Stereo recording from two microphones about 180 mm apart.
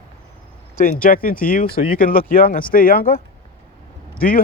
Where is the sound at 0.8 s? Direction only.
50° left (ahead or behind).